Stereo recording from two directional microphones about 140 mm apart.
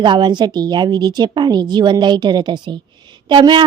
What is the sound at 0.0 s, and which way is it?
A woman's voice, 35° right (ahead or behind).